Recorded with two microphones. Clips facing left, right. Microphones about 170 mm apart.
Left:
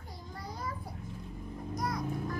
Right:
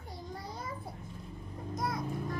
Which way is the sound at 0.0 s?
25° right (ahead or behind).